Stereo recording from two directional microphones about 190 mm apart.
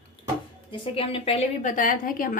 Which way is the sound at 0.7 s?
30° left (ahead or behind).